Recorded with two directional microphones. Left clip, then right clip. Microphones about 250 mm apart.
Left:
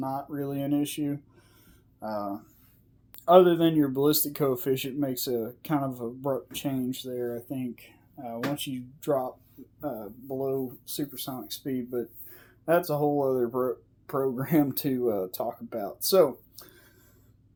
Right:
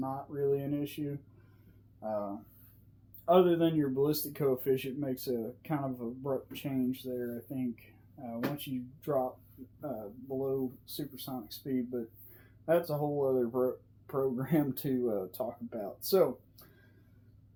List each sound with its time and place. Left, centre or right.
0.0 s a sound: left
2.0 s speech: left
10.4 s speech: left